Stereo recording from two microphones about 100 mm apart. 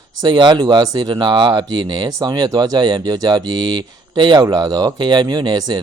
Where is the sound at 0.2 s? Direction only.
50° right (ahead or behind).